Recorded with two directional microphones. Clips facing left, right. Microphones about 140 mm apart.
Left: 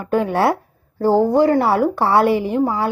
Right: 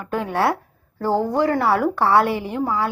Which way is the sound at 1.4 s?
30° left (ahead or behind).